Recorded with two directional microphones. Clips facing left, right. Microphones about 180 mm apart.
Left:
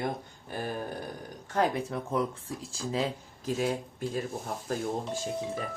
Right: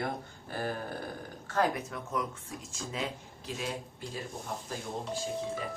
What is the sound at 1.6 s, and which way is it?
Speech, 30° left (ahead or behind).